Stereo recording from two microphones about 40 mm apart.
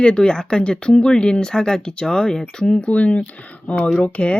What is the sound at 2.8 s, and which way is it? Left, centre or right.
Speech, left.